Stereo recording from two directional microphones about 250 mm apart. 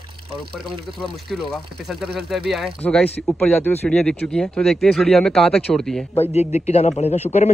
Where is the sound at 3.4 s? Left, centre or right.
Centre.